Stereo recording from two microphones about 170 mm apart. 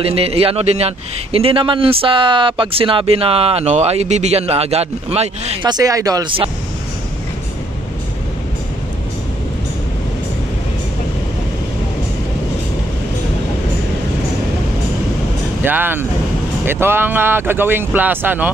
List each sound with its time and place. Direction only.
0.0 s a man's voice: 35° right (ahead or behind)
5.7 s speech: 20° right (ahead or behind)
15.6 s speech: 10° right (ahead or behind)